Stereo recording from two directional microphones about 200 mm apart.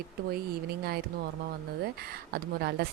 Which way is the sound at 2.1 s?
50° right (ahead or behind).